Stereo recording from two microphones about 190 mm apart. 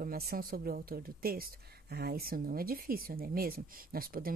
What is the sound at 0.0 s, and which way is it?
Speech, 50° right (ahead or behind).